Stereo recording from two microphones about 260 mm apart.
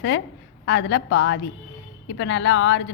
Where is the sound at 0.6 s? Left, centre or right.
Left.